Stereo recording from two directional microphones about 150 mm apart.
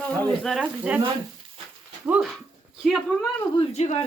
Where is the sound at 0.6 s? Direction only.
10° right (ahead or behind).